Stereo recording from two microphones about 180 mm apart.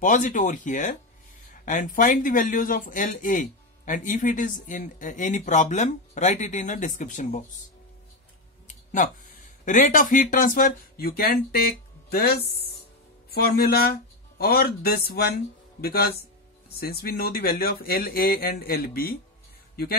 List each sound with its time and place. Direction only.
0.0 s speech: 45° left (ahead or behind)
8.6 s speech: 45° left (ahead or behind)